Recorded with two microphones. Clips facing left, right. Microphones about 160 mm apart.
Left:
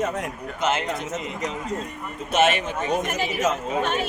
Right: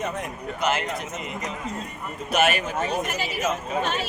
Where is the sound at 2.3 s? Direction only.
25° left (ahead or behind).